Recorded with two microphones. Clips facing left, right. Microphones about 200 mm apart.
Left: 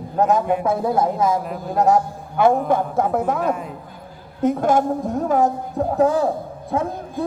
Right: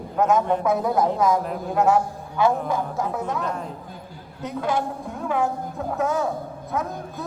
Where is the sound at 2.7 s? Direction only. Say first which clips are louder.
Left 6 dB; 55° left (ahead or behind); by 6.9 s 30° left (ahead or behind).